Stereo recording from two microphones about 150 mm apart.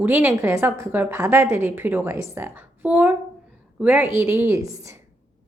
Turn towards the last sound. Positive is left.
turn(degrees=-20)  # may be behind; listen again after turning